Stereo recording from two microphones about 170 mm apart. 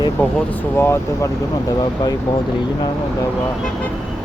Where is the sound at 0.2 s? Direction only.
10° left (ahead or behind).